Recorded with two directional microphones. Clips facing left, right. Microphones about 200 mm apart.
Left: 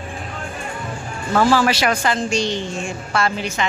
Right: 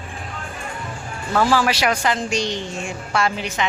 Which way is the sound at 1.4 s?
10° right (ahead or behind).